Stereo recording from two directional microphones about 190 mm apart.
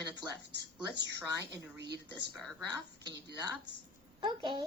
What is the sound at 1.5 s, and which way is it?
Speech, 60° right (ahead or behind).